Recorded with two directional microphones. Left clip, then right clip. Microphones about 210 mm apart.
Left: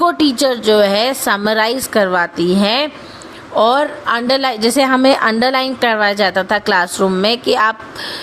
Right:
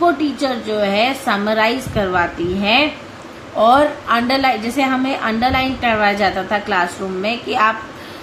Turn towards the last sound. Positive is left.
turn(degrees=55)  # may be behind; listen again after turning